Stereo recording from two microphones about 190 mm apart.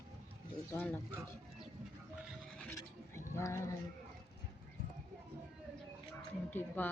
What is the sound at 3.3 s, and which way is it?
Speech, 15° left (ahead or behind).